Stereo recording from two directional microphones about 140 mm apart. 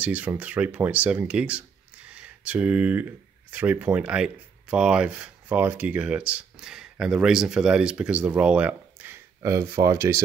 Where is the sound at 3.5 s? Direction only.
10° right (ahead or behind).